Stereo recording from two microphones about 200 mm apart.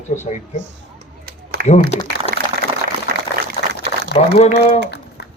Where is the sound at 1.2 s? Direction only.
50° right (ahead or behind).